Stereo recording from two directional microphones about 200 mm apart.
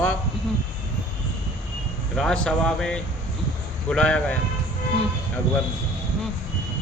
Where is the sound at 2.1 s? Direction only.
5° left (ahead or behind).